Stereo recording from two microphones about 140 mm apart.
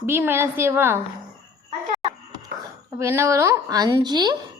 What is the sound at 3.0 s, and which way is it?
A woman's voice, 20° right (ahead or behind).